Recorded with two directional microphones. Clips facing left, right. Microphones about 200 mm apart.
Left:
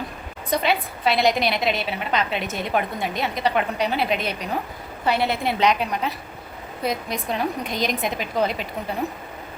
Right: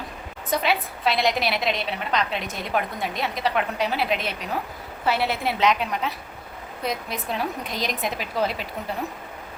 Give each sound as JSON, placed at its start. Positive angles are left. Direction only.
{"t": 0.5, "sound": "a woman's voice", "side_deg": 0}